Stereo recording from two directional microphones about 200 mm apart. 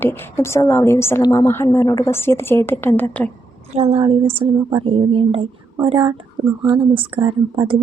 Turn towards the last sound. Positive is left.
turn(degrees=-25)  # may be behind; listen again after turning